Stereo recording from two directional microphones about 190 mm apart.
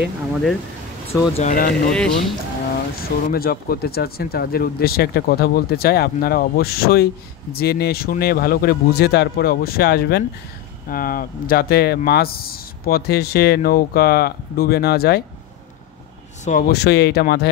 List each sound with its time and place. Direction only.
1.3 s speech: 40° left (ahead or behind)
1.9 s speech: 5° left (ahead or behind)
3.3 s speech: 50° left (ahead or behind)
16.4 s speech: 45° left (ahead or behind)